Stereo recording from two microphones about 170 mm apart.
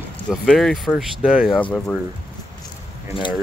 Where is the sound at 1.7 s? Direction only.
5° left (ahead or behind).